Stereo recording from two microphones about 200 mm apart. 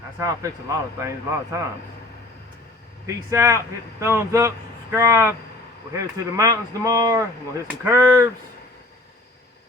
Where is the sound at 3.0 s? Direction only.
15° right (ahead or behind).